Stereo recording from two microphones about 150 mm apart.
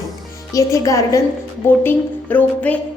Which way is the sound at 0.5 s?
20° left (ahead or behind).